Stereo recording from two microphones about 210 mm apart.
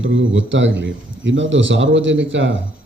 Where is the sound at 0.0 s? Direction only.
60° right (ahead or behind).